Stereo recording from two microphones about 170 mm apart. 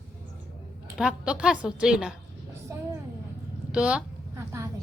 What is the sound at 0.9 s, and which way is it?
A woman's voice, 5° right (ahead or behind).